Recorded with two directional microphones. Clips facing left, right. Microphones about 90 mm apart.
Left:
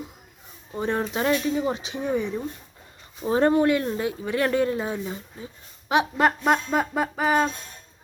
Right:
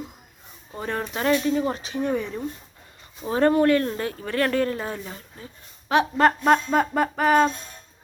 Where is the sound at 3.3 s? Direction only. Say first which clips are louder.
Right 1 dB; 20° left (ahead or behind).